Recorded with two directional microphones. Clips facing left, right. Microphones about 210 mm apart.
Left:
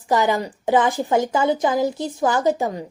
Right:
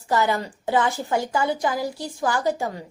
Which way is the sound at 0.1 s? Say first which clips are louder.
Left 3 dB; 15° left (ahead or behind).